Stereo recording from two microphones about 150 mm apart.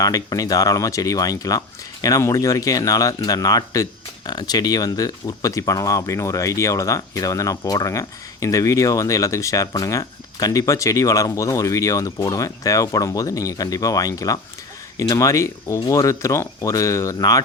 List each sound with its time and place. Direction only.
0.0 s speech: 25° left (ahead or behind)